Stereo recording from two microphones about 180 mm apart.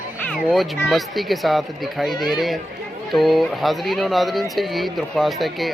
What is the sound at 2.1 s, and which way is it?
Speech, 25° left (ahead or behind).